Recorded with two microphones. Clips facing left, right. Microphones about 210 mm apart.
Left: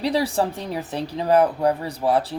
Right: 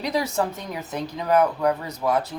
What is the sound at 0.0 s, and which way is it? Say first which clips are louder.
Speech: left 3 dB; 30° left (ahead or behind).